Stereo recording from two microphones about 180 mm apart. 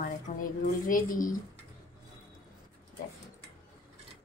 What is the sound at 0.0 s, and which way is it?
Speech, 50° left (ahead or behind).